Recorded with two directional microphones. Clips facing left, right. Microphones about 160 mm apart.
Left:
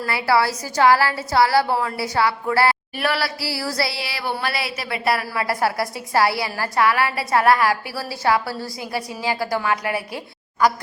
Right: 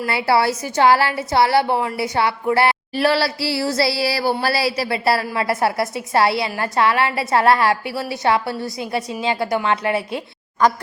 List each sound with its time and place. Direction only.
0.0 s a woman's voice: 25° right (ahead or behind)